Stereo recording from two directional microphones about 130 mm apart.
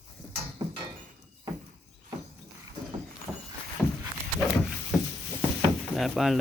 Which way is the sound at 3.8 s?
25° left (ahead or behind).